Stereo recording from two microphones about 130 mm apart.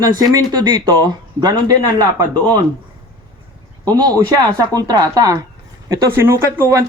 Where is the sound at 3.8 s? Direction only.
35° right (ahead or behind).